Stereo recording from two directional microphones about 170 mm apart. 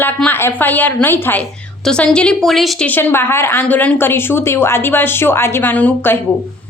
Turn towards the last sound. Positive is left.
turn(degrees=10)  # may be behind; listen again after turning